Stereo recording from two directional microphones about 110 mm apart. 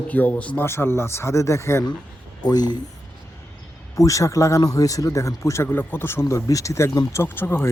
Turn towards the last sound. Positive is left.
turn(degrees=20)  # may be behind; listen again after turning